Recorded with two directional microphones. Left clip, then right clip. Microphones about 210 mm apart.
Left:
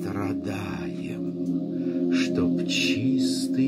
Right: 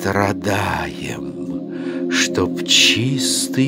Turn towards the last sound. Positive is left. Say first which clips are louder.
# right 6 dB
turn(degrees=-50)  # may be behind; listen again after turning